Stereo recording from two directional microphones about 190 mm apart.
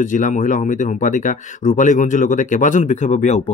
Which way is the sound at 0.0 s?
40° left (ahead or behind).